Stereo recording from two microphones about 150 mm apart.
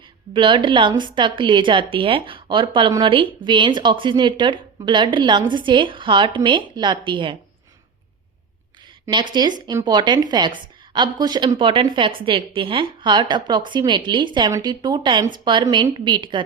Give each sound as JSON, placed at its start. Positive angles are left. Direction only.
{"t": 0.3, "sound": "speech", "side_deg": -30}
{"t": 9.0, "sound": "speech", "side_deg": -30}